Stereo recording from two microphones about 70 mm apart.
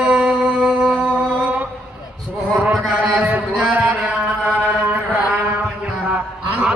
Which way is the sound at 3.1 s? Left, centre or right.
Right.